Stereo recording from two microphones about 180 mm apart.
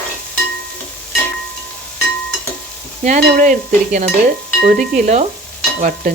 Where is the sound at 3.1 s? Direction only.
50° right (ahead or behind).